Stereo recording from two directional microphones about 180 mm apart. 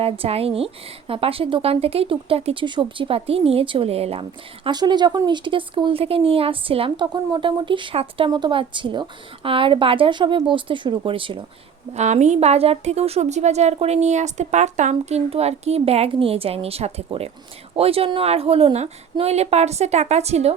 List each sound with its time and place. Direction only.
0.0 s speech: 35° right (ahead or behind)
11.9 s a woman's voice: 40° right (ahead or behind)